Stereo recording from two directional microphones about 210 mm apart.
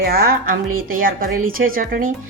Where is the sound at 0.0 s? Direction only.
45° right (ahead or behind).